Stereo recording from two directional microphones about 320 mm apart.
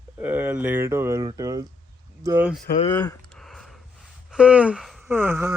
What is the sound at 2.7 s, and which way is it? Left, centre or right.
Speech, centre.